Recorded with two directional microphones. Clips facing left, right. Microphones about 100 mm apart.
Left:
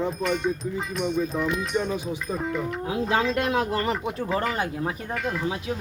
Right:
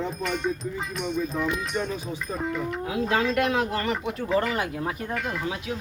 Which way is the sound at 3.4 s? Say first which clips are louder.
Even; 35° left (ahead or behind).